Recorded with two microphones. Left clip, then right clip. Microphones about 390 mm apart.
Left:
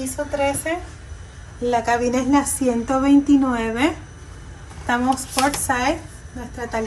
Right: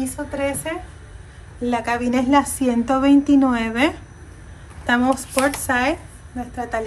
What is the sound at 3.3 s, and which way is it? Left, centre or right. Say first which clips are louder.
Speech: right 1 dB; right.